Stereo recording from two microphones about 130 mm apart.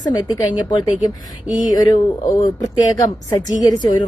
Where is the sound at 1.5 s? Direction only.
30° left (ahead or behind).